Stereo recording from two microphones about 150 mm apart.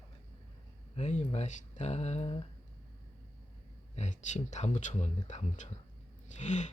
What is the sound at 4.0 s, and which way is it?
Speech, 55° left (ahead or behind).